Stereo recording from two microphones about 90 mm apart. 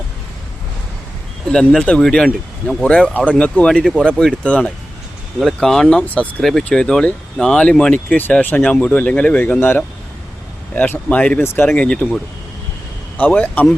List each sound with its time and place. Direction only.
1.5 s speech: 10° left (ahead or behind)
5.4 s speech: centre (ahead or behind); by 11.9 s 20° left (ahead or behind)
11.9 s speech: 5° left (ahead or behind)
13.1 s speech: 20° left (ahead or behind)